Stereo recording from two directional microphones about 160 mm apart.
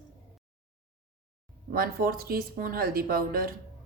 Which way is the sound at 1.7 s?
65° right (ahead or behind).